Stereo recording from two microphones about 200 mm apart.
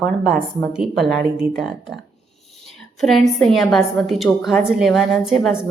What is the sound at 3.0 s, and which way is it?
A woman's voice, centre (ahead or behind).